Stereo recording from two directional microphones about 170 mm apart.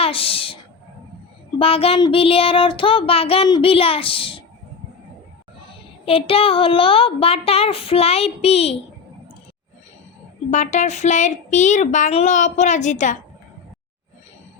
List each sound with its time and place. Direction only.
0.0 s a sound: 35° left (ahead or behind)
1.5 s child singing: 35° left (ahead or behind)
6.1 s child singing: 35° left (ahead or behind)
10.5 s a woman's voice: 45° left (ahead or behind)